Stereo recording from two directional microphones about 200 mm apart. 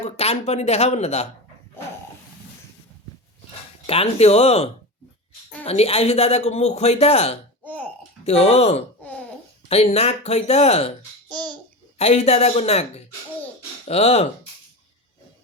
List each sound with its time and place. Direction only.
0.0 s speech: 30° left (ahead or behind)
3.8 s speech: 30° left (ahead or behind)
7.6 s a sound: 10° left (ahead or behind)
8.2 s speech: 30° left (ahead or behind)
9.0 s a sound: 10° left (ahead or behind)
9.6 s speech: 30° left (ahead or behind)
11.9 s speech: 30° left (ahead or behind)